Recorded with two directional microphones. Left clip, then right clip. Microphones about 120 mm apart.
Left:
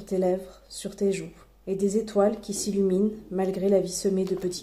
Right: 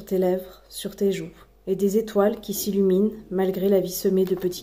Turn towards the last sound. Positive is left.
turn(degrees=-15)  # may be behind; listen again after turning